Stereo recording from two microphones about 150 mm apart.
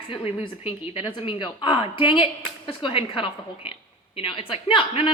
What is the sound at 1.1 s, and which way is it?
Speech, 35° left (ahead or behind).